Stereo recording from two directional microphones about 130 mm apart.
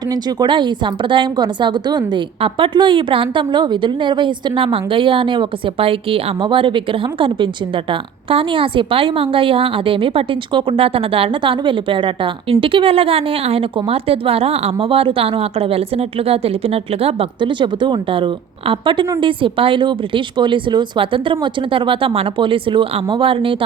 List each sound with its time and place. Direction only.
0.1 s a woman's voice: 30° right (ahead or behind)